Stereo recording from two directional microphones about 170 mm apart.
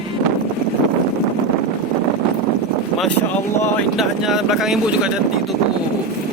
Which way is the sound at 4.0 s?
Centre (ahead or behind).